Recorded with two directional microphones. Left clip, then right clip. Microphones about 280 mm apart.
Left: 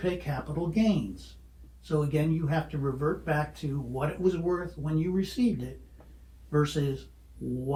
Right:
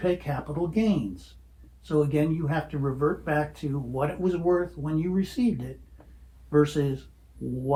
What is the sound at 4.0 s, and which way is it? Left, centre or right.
Speech, right.